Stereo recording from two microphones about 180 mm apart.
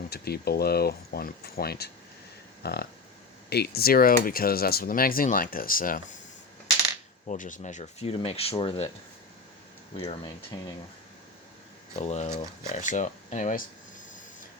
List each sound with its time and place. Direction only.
0.1 s speech: 60° left (ahead or behind)
7.3 s speech: 45° left (ahead or behind)
9.9 s speech: 30° left (ahead or behind)
11.9 s speech: 40° left (ahead or behind)